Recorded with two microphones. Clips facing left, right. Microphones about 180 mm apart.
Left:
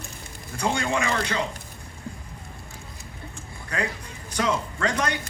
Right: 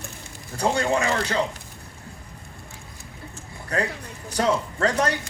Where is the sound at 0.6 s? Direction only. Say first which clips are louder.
Right 3 dB; 35° right (ahead or behind).